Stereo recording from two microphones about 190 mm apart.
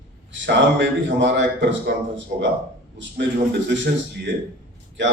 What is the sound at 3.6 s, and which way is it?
Speech, 70° right (ahead or behind).